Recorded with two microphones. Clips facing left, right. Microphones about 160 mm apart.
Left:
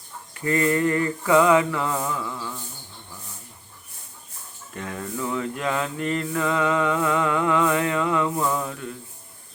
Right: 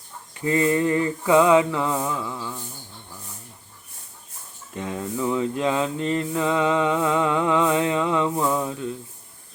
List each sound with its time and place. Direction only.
0.4 s mantra: 20° right (ahead or behind)
4.7 s mantra: 20° right (ahead or behind)